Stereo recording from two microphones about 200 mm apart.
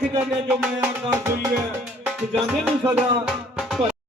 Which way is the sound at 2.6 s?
5° right (ahead or behind).